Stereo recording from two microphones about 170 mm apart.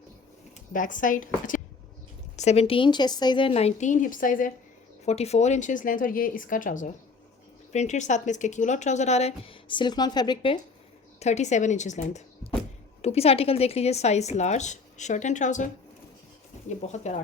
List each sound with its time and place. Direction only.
0.5 s speech: 50° left (ahead or behind)
5.0 s speech: 40° left (ahead or behind)
11.2 s speech: 40° left (ahead or behind)